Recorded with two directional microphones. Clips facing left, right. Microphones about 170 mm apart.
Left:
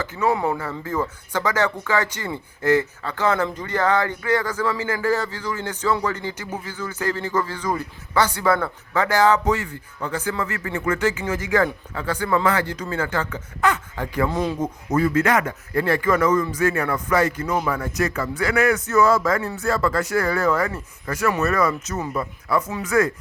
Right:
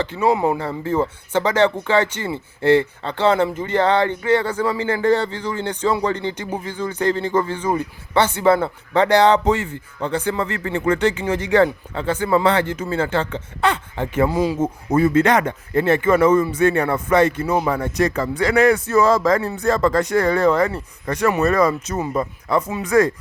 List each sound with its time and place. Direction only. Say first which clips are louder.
0.2 s speech: right 3 dB; 15° right (ahead or behind)
14.3 s speech: right 4 dB; 10° right (ahead or behind)
14.6 s speech: right 3 dB; 25° right (ahead or behind)